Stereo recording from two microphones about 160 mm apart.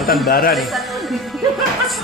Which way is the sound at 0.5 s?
Centre (ahead or behind).